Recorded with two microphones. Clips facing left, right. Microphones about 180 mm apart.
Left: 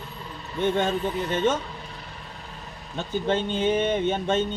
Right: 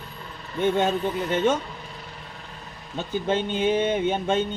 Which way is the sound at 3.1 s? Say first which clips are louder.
Even; 10° right (ahead or behind).